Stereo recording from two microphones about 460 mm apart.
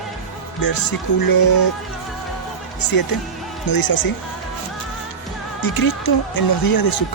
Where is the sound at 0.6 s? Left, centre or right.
Left.